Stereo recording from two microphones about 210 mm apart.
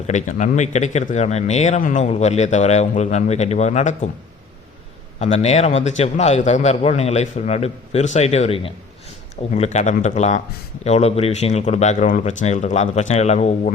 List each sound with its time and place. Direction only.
0.1 s speech: 35° left (ahead or behind)
5.2 s speech: 30° left (ahead or behind)